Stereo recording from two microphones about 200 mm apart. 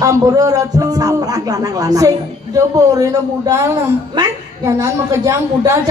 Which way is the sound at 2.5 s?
15° right (ahead or behind).